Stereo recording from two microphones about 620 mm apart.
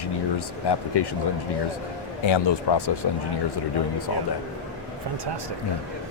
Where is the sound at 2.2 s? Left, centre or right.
Left.